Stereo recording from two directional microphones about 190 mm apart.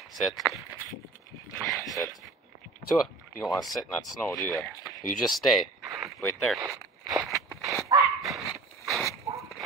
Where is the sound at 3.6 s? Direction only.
Centre (ahead or behind).